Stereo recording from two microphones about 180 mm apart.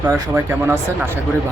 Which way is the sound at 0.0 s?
15° right (ahead or behind).